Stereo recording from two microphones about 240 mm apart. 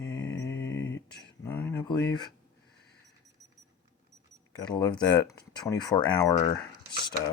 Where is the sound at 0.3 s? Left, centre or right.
Centre.